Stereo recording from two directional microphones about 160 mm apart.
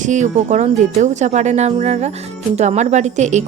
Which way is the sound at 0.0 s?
50° right (ahead or behind).